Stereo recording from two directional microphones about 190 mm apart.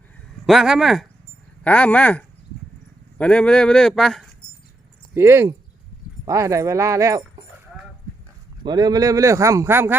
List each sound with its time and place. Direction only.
0.4 s speech: centre (ahead or behind)
5.1 s speech: 15° right (ahead or behind)
8.6 s speech: 20° right (ahead or behind)